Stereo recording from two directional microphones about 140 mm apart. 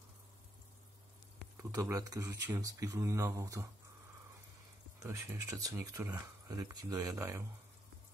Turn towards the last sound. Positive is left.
turn(degrees=-20)  # may be behind; listen again after turning